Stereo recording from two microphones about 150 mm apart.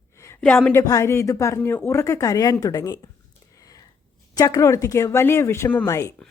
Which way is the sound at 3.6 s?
25° left (ahead or behind).